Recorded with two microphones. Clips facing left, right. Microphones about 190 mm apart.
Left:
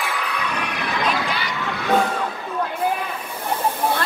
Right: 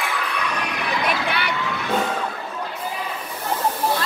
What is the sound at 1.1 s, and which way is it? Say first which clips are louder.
Vehicle: right 1 dB; 60° right (ahead or behind).